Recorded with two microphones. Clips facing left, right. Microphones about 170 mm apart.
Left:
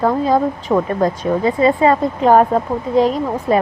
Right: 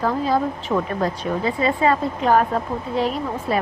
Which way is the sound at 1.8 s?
35° left (ahead or behind).